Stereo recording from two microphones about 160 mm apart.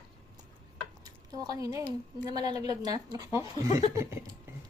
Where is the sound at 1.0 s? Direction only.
25° right (ahead or behind).